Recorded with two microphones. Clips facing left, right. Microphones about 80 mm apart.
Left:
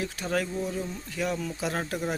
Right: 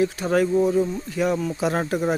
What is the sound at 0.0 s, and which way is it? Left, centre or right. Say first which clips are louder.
Speech: right 9 dB; right.